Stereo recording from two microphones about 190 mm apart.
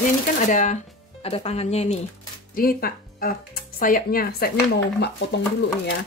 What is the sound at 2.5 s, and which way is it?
Speech, 50° left (ahead or behind).